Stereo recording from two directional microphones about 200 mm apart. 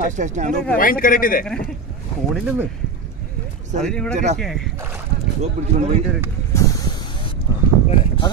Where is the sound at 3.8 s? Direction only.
5° left (ahead or behind).